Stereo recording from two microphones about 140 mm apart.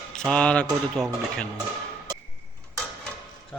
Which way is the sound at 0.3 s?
10° left (ahead or behind).